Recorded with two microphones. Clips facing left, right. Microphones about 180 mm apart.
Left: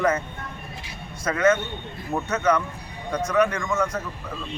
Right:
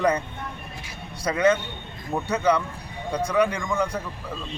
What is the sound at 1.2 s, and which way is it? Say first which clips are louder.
A man's voice: even; 15° right (ahead or behind).